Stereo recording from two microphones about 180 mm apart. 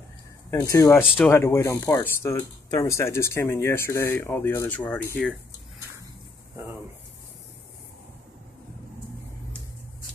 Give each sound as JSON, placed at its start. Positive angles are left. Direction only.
{"t": 0.5, "sound": "speech", "side_deg": 15}